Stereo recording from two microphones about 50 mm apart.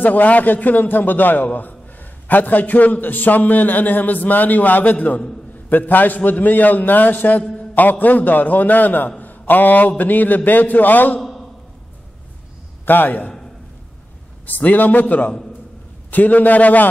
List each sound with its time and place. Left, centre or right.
0.0 s a man's voice: left
11.1 s a sound: centre
12.8 s a man's voice: left
14.4 s a man's voice: left